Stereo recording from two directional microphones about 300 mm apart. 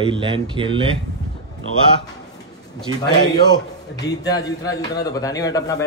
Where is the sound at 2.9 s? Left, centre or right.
Centre.